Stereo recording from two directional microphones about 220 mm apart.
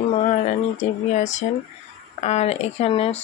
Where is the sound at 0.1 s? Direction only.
30° left (ahead or behind).